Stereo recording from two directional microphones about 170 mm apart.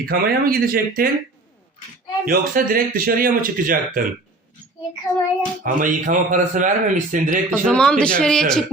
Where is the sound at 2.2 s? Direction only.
55° right (ahead or behind).